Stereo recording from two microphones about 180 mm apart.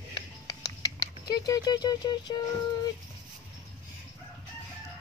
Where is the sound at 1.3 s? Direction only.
20° left (ahead or behind).